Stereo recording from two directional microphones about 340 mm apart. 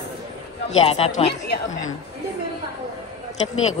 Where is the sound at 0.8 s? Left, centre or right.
Centre.